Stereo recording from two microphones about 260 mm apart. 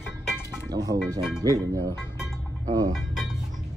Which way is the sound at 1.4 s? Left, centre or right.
Centre.